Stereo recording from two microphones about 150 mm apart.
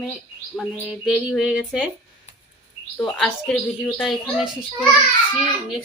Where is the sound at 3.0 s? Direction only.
5° left (ahead or behind).